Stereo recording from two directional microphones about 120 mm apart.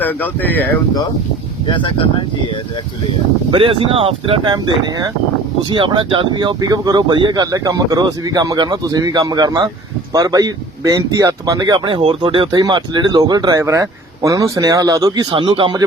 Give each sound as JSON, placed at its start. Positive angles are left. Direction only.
{"t": 0.0, "sound": "speech", "side_deg": 15}
{"t": 1.6, "sound": "speech", "side_deg": 45}
{"t": 3.5, "sound": "speech", "side_deg": -45}
{"t": 4.4, "sound": "speech", "side_deg": -35}